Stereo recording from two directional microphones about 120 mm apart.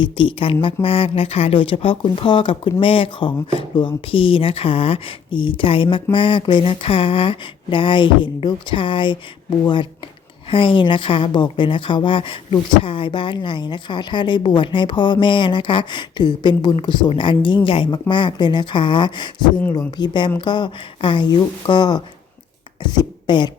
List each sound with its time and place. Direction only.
0.0 s speech: 45° left (ahead or behind)
10.5 s speech: 45° left (ahead or behind)